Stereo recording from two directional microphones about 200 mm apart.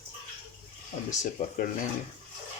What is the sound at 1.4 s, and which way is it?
Speech, 40° left (ahead or behind).